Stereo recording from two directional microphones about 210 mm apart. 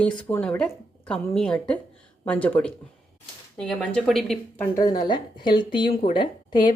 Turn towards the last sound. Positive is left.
turn(degrees=20)  # may be behind; listen again after turning